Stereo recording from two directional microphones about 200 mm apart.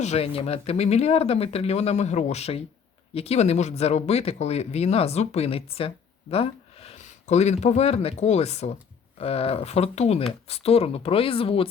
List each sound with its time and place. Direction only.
0.0 s speech: 30° left (ahead or behind)